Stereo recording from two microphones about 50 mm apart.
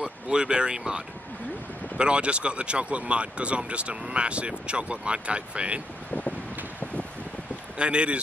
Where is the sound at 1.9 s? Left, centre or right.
Right.